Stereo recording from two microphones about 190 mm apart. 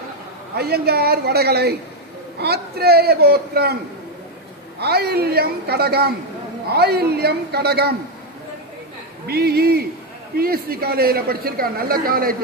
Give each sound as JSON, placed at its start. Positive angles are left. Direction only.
{"t": 0.5, "sound": "a man's voice", "side_deg": -55}
{"t": 4.8, "sound": "a man's voice", "side_deg": -55}
{"t": 9.2, "sound": "speech", "side_deg": -55}